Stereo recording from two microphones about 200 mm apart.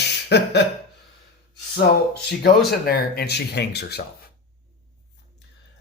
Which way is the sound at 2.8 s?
50° left (ahead or behind).